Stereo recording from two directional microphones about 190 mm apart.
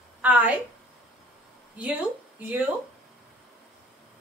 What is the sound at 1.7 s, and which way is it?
Speech, 5° right (ahead or behind).